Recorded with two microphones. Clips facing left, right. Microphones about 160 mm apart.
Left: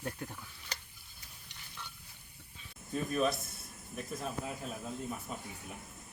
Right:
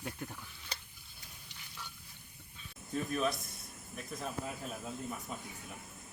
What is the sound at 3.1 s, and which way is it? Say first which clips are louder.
Speech: left 3 dB; 5° left (ahead or behind).